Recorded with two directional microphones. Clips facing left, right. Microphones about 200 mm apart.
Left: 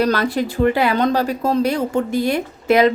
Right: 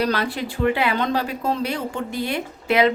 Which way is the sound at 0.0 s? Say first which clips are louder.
Left 5 dB; 45° left (ahead or behind).